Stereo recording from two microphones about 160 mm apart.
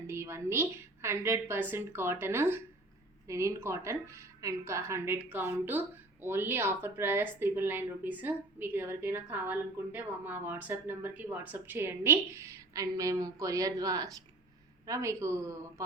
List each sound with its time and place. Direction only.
0.1 s a woman's voice: 15° right (ahead or behind)